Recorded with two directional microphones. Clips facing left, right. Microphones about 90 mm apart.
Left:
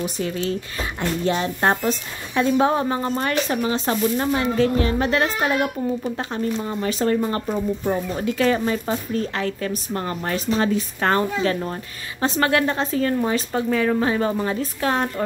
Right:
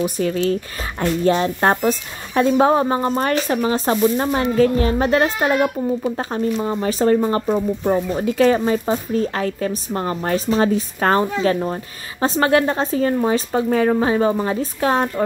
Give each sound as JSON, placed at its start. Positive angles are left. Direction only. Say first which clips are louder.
{"t": 0.0, "sound": "speech", "louder": "right 5 dB", "side_deg": -50}
{"t": 1.2, "sound": "a woman's voice", "louder": "right 4 dB", "side_deg": -35}
{"t": 9.9, "sound": "a woman's voice", "louder": "right 6 dB", "side_deg": -25}
{"t": 13.2, "sound": "a woman's voice", "louder": "right 4 dB", "side_deg": -25}